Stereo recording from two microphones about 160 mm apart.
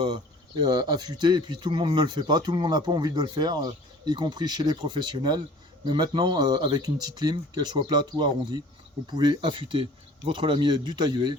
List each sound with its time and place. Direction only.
0.6 s speech: 25° right (ahead or behind)